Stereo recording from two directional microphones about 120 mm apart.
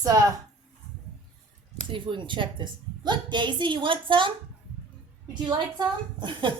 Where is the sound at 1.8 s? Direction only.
45° right (ahead or behind).